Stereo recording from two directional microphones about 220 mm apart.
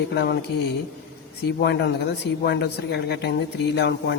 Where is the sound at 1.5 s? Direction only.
50° left (ahead or behind).